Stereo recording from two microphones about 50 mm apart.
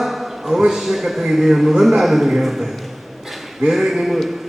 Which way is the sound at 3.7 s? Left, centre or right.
Centre.